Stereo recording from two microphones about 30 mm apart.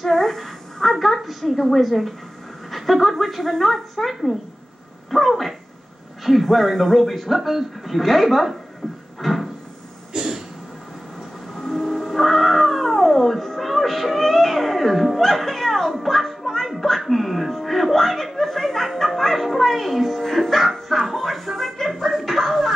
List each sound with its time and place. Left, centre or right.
0.1 s a woman's voice: centre
2.7 s a sound: centre
3.2 s speech: centre
8.8 s a sound: centre
9.2 s cupboard open or close: centre
10.1 s throat clearing: centre
11.6 s cat: centre
17.0 s music: centre
20.2 s music: centre
20.9 s a sound: centre
21.9 s music: centre